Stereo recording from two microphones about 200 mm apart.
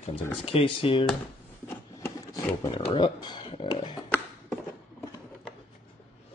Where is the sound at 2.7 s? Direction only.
25° left (ahead or behind).